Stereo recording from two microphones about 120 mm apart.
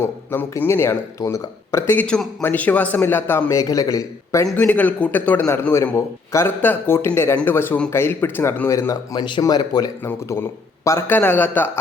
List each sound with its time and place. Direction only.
0.0 s a man's voice: 20° left (ahead or behind)
4.4 s a man's voice: 15° left (ahead or behind)
9.1 s speech: 40° left (ahead or behind)
10.0 s a man's voice: 15° left (ahead or behind)